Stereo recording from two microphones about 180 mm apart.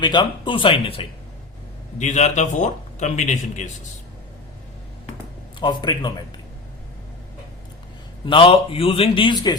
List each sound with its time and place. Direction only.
0.0 s a man's voice: 25° left (ahead or behind)
2.0 s a man's voice: 40° left (ahead or behind)
5.5 s a man's voice: 25° left (ahead or behind)
8.2 s a man's voice: 30° left (ahead or behind)